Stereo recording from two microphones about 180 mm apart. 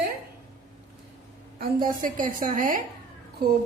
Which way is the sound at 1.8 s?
50° right (ahead or behind).